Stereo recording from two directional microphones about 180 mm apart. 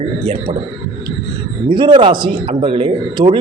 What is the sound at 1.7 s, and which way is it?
Speech, 25° right (ahead or behind).